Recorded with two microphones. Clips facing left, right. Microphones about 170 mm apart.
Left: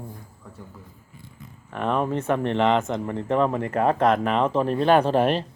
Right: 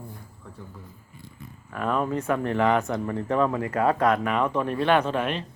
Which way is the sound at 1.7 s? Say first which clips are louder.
Left 2 dB; 25° left (ahead or behind).